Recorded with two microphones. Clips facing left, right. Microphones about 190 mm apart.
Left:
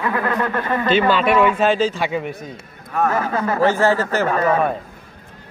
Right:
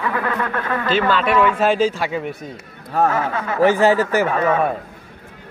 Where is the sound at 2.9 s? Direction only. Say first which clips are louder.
Right 2 dB; 35° right (ahead or behind).